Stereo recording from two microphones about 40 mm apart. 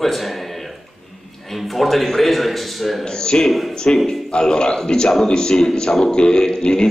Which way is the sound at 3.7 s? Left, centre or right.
Centre.